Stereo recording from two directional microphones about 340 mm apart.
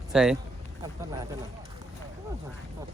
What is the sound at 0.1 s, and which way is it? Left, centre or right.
Speech, centre.